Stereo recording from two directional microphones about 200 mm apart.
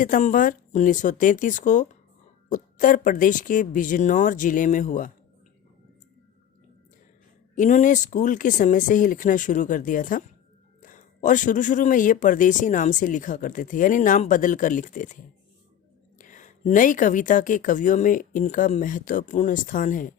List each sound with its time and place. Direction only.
0.0 s speech: 40° left (ahead or behind)
7.5 s speech: 40° left (ahead or behind)